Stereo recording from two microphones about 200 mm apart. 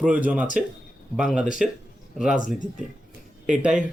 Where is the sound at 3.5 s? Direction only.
5° right (ahead or behind).